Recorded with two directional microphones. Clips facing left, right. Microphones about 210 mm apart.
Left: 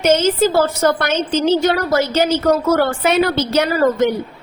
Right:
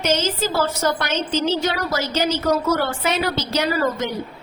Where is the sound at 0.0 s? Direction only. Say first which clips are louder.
Left 7 dB; 55° left (ahead or behind).